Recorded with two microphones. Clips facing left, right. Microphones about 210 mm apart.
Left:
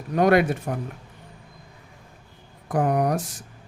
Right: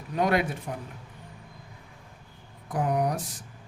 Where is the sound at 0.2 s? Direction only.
65° left (ahead or behind).